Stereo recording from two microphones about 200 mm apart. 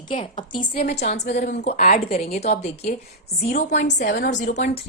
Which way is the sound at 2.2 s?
30° left (ahead or behind).